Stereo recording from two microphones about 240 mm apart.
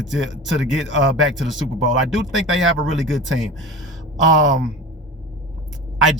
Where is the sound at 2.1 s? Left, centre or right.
Centre.